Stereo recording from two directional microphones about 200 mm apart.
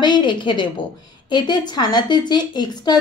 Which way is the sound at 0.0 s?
20° left (ahead or behind).